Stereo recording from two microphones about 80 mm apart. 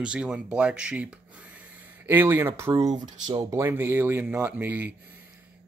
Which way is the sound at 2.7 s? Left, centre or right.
Right.